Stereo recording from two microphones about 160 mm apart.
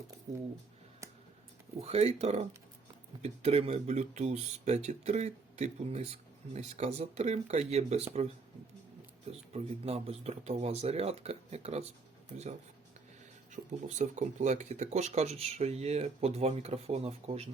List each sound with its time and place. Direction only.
1.8 s speech: 40° right (ahead or behind)
9.5 s speech: 40° right (ahead or behind)
13.5 s speech: 50° right (ahead or behind)